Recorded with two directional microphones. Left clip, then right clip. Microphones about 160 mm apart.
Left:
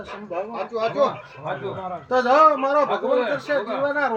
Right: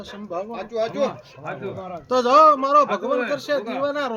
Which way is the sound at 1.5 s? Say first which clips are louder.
Left 2 dB; 50° right (ahead or behind).